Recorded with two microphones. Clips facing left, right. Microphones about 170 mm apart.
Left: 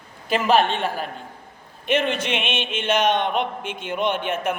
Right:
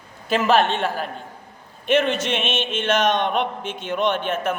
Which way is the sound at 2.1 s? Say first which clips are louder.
Right 2 dB; 55° left (ahead or behind).